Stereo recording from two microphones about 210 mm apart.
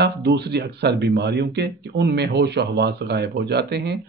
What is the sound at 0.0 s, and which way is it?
Speech, 55° right (ahead or behind).